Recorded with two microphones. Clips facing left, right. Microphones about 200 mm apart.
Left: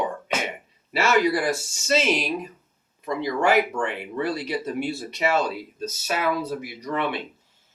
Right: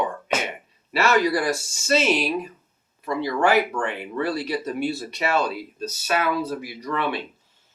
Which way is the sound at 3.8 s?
20° left (ahead or behind).